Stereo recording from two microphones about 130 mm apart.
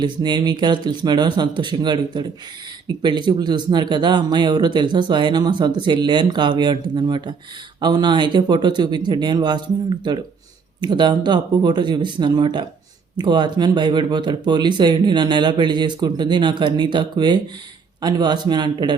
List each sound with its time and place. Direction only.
0.0 s speech: 35° right (ahead or behind)